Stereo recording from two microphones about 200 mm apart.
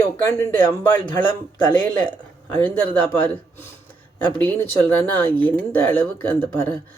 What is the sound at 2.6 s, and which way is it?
Speech, 10° left (ahead or behind).